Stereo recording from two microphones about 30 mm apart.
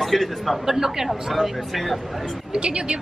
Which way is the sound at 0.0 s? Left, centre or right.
Centre.